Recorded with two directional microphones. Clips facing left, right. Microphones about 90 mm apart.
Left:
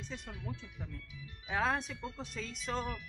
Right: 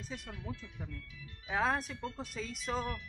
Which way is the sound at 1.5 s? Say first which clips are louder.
Right 1 dB; 5° right (ahead or behind).